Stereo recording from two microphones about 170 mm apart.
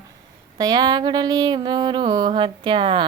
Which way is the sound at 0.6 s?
25° right (ahead or behind).